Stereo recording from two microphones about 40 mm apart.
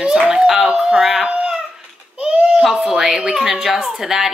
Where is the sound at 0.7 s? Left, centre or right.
Right.